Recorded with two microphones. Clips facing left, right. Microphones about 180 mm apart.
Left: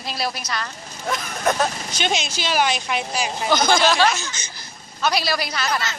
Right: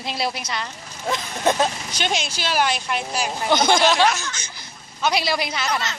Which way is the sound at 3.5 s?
20° right (ahead or behind).